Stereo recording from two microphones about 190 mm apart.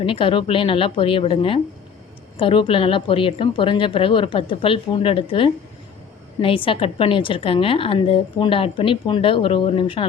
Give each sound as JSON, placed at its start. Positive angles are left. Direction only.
{"t": 0.0, "sound": "a woman's voice", "side_deg": 25}